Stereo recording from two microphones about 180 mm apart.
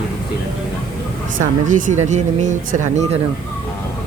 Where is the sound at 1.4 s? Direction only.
45° right (ahead or behind).